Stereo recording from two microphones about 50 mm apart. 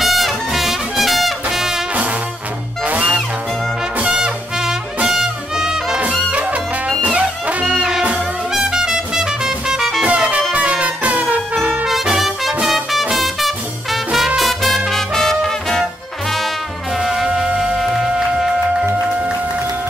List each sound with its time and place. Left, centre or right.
0.0 s brass instrument: centre
4.0 s music: centre
7.2 s music: right
8.5 s music: centre
10.0 s music: right
11.8 s brass instrument: centre
12.6 s music: centre
17.0 s music: centre